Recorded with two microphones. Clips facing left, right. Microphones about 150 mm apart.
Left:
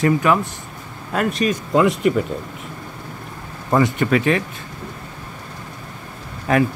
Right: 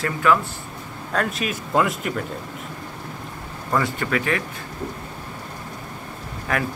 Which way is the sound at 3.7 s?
20° left (ahead or behind).